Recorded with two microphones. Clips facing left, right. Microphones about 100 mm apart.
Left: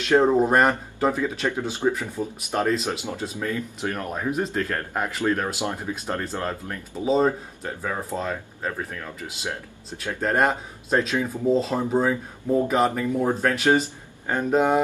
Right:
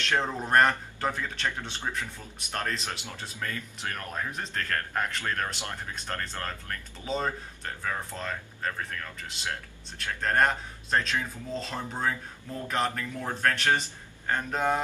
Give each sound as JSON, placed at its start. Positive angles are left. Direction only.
{"t": 0.1, "sound": "speech", "side_deg": 25}
{"t": 0.5, "sound": "speech", "side_deg": 10}
{"t": 3.3, "sound": "speech", "side_deg": 20}